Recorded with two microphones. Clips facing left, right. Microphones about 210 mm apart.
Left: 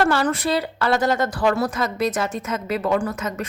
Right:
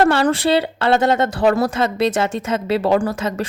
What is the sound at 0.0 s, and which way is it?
A woman's voice, 25° right (ahead or behind).